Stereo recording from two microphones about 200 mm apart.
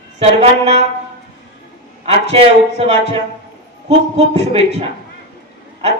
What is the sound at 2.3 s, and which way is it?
Speech, 30° right (ahead or behind).